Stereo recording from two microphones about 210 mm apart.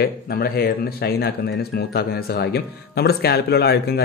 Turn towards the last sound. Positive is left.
turn(degrees=50)  # may be behind; listen again after turning